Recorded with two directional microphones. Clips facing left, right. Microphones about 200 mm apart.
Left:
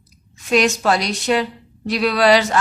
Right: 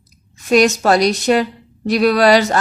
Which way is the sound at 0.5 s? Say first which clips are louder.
Right 4 dB; 40° right (ahead or behind).